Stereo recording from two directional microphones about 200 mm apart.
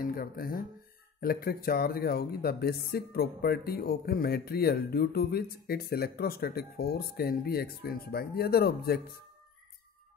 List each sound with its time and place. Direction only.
0.0 s speech: 45° left (ahead or behind)